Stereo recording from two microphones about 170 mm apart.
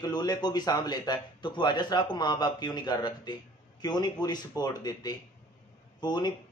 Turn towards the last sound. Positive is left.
turn(degrees=25)  # may be behind; listen again after turning